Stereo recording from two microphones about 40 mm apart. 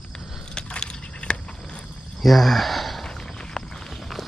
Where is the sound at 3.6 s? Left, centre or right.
Centre.